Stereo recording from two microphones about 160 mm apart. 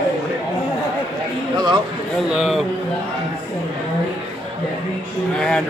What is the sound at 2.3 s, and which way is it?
Speech, centre (ahead or behind).